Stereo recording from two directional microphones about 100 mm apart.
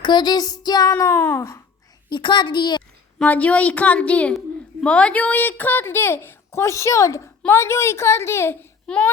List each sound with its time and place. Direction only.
0.0 s child singing: 45° left (ahead or behind)
0.9 s a woman's voice: 25° left (ahead or behind)
2.1 s child singing: 50° left (ahead or behind)
3.2 s a woman's voice: 15° left (ahead or behind)
8.9 s a woman's voice: 10° left (ahead or behind)